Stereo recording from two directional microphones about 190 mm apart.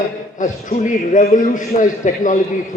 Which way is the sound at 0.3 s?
40° left (ahead or behind).